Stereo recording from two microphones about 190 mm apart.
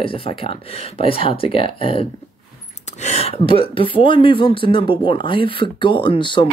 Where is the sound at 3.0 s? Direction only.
30° left (ahead or behind).